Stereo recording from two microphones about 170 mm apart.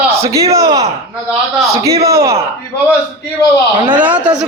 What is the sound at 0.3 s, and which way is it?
Speech, 20° right (ahead or behind).